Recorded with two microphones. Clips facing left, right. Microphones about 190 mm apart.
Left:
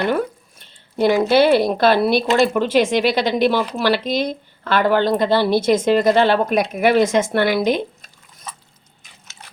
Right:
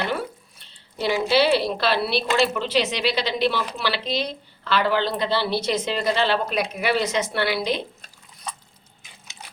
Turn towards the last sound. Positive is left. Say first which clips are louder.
# left 7 dB
turn(degrees=50)  # may be behind; listen again after turning